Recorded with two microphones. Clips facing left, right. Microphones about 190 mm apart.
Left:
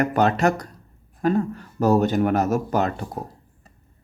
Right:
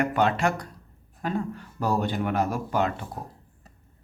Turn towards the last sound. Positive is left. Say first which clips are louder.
# left 4 dB
turn(degrees=40)  # may be behind; listen again after turning